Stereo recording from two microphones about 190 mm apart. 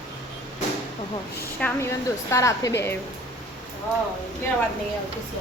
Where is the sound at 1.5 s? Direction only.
5° left (ahead or behind).